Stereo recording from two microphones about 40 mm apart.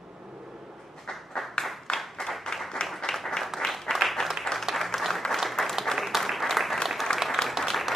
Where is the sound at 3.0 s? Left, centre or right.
Centre.